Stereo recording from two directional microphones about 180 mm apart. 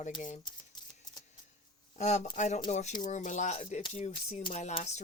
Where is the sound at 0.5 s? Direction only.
25° left (ahead or behind).